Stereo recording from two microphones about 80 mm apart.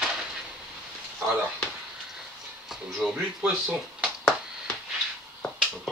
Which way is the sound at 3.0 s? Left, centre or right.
Centre.